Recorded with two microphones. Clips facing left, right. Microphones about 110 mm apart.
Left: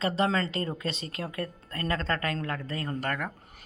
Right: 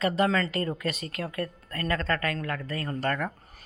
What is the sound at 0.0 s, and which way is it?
Speech, 30° left (ahead or behind).